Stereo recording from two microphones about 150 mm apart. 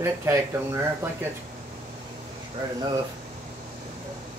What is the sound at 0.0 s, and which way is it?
Speech, 20° right (ahead or behind).